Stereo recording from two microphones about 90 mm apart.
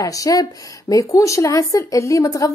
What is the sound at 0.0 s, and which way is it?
Speech, 40° left (ahead or behind).